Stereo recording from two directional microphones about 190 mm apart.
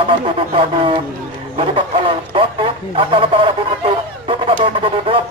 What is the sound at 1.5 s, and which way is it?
Radio, 30° right (ahead or behind).